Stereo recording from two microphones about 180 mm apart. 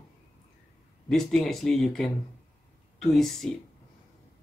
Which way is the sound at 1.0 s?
Centre (ahead or behind).